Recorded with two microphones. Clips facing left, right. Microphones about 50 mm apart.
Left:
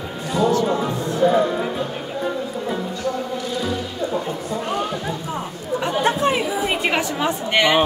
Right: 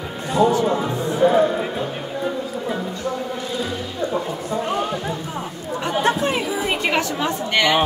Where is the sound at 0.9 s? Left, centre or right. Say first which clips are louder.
Right 2 dB; right.